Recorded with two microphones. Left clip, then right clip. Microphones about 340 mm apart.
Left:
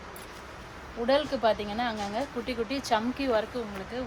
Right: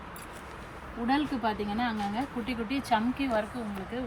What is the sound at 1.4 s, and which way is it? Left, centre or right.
Speech, left.